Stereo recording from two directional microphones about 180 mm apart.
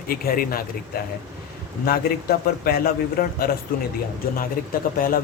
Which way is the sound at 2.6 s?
55° left (ahead or behind).